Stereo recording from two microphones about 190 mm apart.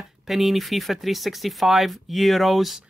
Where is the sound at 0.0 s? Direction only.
Centre (ahead or behind).